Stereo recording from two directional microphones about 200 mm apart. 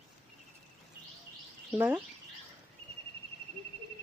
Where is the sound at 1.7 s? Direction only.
5° right (ahead or behind).